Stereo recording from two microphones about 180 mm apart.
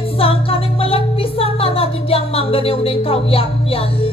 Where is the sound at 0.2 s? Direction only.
30° left (ahead or behind).